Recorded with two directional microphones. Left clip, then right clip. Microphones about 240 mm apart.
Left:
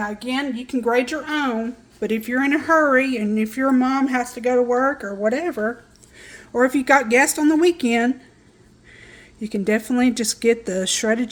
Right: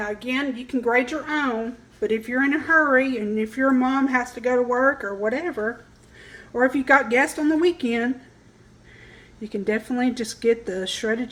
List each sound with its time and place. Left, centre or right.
0.0 s speech: left
9.4 s speech: left